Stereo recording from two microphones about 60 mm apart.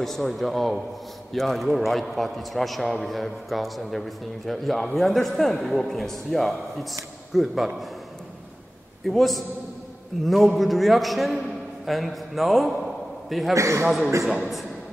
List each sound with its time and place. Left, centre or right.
0.0 s a man's voice: centre
9.0 s a man's voice: centre
13.6 s a man's voice: right
13.8 s a man's voice: centre